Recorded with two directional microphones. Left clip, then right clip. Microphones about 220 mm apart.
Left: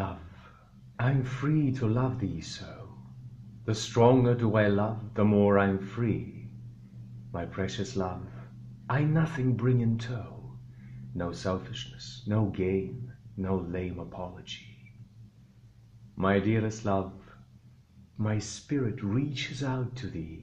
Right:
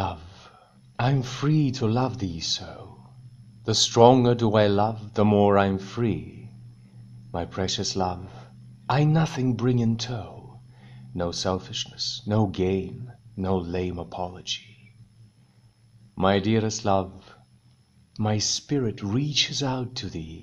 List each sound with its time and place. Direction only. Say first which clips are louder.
0.9 s speech: right 6 dB; 35° right (ahead or behind)
7.2 s a man's voice: right 6 dB; 35° right (ahead or behind)
16.2 s speech: right 5 dB; 35° right (ahead or behind)